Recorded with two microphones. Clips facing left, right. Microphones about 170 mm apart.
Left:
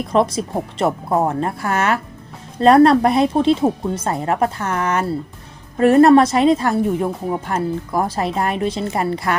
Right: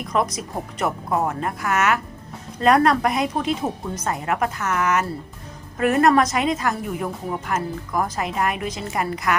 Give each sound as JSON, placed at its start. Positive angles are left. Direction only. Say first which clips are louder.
{"t": 0.1, "sound": "speech", "louder": "left 6 dB", "side_deg": 30}